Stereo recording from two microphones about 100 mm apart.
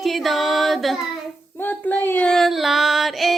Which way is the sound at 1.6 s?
15° left (ahead or behind).